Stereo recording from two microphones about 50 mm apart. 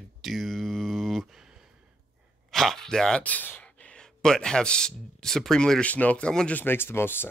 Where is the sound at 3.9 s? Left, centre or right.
Centre.